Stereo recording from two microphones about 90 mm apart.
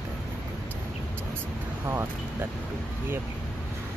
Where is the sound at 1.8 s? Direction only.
30° right (ahead or behind).